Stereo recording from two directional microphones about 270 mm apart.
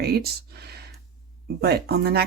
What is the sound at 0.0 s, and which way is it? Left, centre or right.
Speech, right.